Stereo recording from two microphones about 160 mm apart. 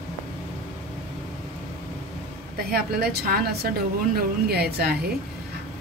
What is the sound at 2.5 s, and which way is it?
A woman's voice, 75° right (ahead or behind).